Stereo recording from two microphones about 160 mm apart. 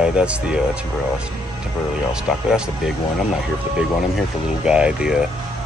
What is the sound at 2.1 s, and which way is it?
Speech, 5° right (ahead or behind).